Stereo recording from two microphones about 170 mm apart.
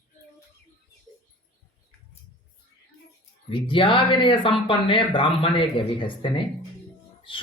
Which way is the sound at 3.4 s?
30° left (ahead or behind).